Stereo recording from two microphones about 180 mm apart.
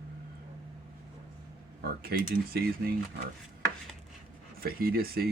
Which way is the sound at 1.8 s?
55° right (ahead or behind).